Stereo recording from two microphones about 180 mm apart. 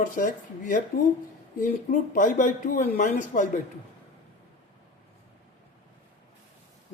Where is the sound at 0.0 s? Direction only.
45° left (ahead or behind).